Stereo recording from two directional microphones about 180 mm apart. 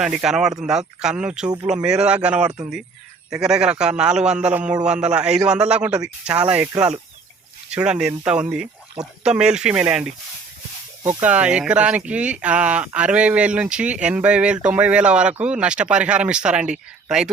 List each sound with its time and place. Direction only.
0.0 s a man's voice: 5° right (ahead or behind)
7.7 s a man's voice: 5° right (ahead or behind)
11.2 s speech: 10° right (ahead or behind)